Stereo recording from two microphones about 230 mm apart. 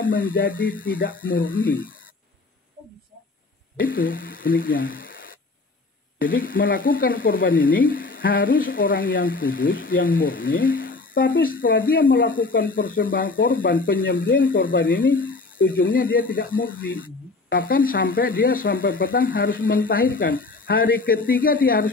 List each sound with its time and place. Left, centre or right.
0.0 s speech: left
3.7 s speech: left